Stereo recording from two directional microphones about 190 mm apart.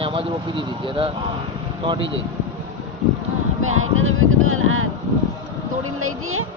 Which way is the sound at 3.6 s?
90° right.